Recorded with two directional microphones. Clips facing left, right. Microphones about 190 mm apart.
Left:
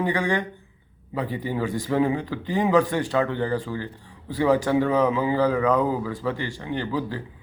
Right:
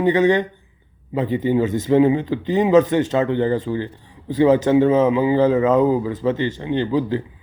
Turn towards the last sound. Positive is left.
turn(degrees=-20)  # may be behind; listen again after turning